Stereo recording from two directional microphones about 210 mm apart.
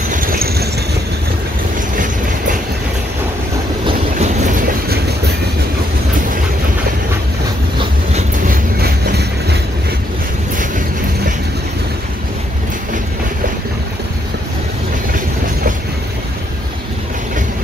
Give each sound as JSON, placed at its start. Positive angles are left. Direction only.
{"t": 0.1, "sound": "train", "side_deg": -40}
{"t": 3.8, "sound": "train", "side_deg": -35}
{"t": 8.1, "sound": "train", "side_deg": -45}